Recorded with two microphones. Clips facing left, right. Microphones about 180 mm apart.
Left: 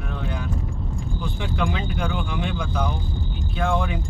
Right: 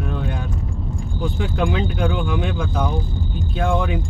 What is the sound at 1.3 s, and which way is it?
Speech, 50° right (ahead or behind).